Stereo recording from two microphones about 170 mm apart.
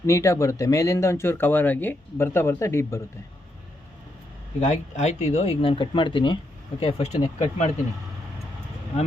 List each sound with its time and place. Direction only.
0.0 s speech: 20° left (ahead or behind)
4.6 s speech: 45° left (ahead or behind)